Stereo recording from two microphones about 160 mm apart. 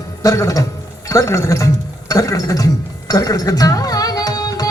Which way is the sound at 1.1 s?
20° left (ahead or behind).